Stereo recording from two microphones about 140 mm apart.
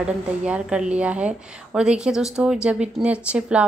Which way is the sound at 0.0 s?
5° right (ahead or behind).